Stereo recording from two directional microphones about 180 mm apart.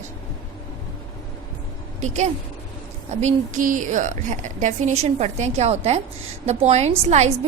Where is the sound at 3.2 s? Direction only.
40° right (ahead or behind).